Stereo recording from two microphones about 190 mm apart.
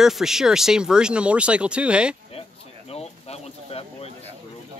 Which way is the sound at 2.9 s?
35° left (ahead or behind).